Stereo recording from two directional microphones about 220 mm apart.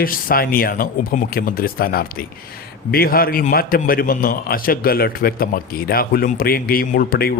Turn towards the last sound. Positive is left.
turn(degrees=40)  # may be behind; listen again after turning